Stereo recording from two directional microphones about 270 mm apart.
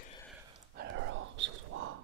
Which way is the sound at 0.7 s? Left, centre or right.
Right.